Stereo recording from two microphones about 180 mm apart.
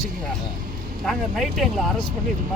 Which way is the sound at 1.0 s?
Centre (ahead or behind).